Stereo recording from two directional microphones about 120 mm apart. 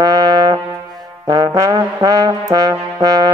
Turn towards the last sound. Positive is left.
turn(degrees=-30)  # may be behind; listen again after turning